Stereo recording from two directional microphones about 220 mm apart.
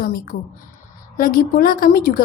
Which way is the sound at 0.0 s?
45° left (ahead or behind).